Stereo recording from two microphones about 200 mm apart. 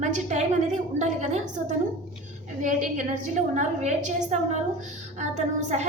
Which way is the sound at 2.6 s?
40° right (ahead or behind).